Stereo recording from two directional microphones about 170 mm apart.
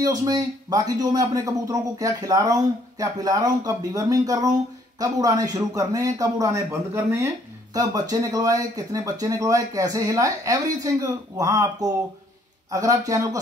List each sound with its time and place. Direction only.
0.0 s speech: 20° right (ahead or behind)